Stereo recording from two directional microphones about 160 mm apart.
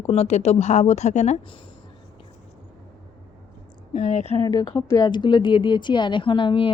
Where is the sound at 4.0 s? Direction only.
45° left (ahead or behind).